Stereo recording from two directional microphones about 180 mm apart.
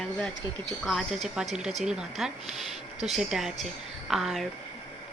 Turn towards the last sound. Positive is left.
turn(degrees=0)  # may be behind; listen again after turning